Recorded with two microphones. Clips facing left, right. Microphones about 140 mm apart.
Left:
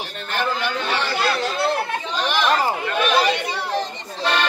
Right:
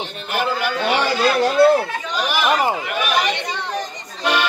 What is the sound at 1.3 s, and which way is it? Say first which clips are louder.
Speech: right 9 dB; 55° right (ahead or behind).